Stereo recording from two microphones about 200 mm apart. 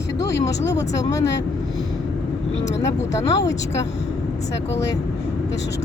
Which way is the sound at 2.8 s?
15° left (ahead or behind).